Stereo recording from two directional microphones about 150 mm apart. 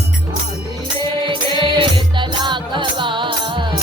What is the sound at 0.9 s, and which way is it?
Music, 35° right (ahead or behind).